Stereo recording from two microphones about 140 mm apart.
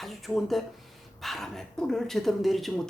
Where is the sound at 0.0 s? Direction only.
Centre (ahead or behind).